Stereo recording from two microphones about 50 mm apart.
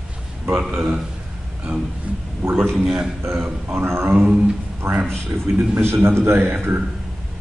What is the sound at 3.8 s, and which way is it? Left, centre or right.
A man's voice, right.